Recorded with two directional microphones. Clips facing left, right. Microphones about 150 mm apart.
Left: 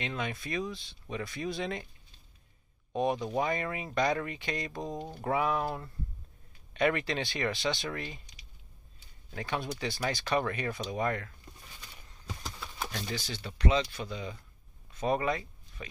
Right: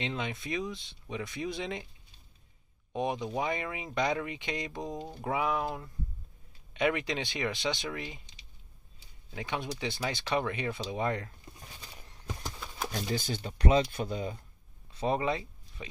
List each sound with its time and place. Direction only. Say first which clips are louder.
0.0 s speech: even; 20° right (ahead or behind)
2.9 s speech: left 2 dB; 15° right (ahead or behind)
9.3 s speech: left 1 dB; 15° right (ahead or behind)
13.1 s speech: right 4 dB; 50° right (ahead or behind)
15.0 s speech: even; 25° right (ahead or behind)